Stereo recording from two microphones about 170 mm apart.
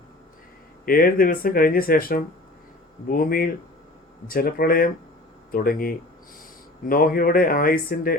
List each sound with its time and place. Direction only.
0.9 s speech: 55° left (ahead or behind)